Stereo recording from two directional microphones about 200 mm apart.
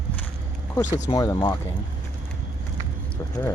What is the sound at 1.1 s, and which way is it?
Speech, 20° left (ahead or behind).